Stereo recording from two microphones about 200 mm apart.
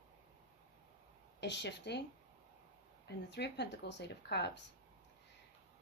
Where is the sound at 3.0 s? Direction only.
55° left (ahead or behind).